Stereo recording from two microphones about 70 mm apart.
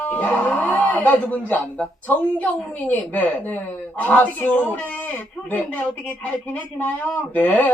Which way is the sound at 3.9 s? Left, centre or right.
Left.